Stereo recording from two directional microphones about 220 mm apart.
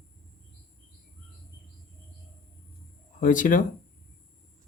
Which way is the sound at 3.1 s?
35° left (ahead or behind).